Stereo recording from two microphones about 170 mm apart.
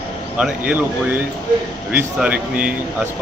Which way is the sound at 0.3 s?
10° right (ahead or behind).